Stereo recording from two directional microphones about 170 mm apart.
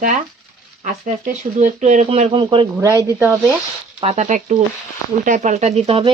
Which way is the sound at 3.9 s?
40° right (ahead or behind).